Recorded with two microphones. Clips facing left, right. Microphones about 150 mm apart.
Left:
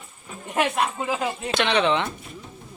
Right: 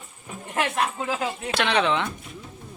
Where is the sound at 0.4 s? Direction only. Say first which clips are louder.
Left 2 dB; 20° left (ahead or behind).